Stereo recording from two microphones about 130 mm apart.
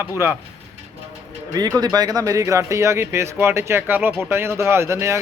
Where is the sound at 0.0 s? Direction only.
20° right (ahead or behind).